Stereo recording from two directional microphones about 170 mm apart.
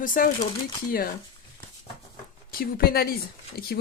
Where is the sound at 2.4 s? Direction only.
60° left (ahead or behind).